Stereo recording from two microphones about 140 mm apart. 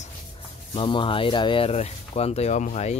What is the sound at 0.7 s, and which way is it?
Speech, 35° left (ahead or behind).